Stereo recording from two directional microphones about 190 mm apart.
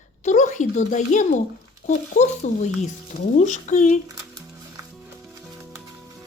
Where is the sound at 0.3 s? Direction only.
40° left (ahead or behind).